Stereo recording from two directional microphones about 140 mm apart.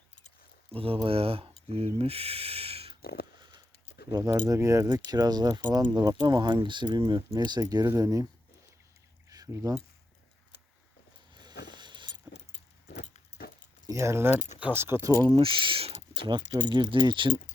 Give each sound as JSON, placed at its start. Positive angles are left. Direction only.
{"t": 0.7, "sound": "speech", "side_deg": -40}
{"t": 3.3, "sound": "a sound", "side_deg": -35}
{"t": 4.1, "sound": "speech", "side_deg": -25}
{"t": 9.3, "sound": "a sound", "side_deg": -25}
{"t": 11.3, "sound": "keys jangling", "side_deg": -30}
{"t": 13.8, "sound": "speech", "side_deg": -20}
{"t": 15.3, "sound": "speech", "side_deg": -40}